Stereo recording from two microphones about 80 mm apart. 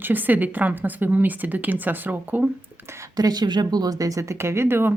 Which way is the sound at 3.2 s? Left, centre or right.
Right.